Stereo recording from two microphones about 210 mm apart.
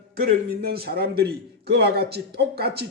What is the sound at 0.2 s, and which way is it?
A man's voice, 50° right (ahead or behind).